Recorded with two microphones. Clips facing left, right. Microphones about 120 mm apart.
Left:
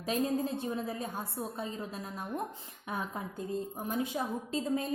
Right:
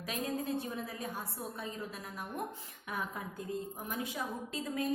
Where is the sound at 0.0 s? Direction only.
30° left (ahead or behind).